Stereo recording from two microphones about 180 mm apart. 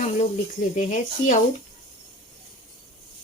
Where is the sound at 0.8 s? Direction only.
40° left (ahead or behind).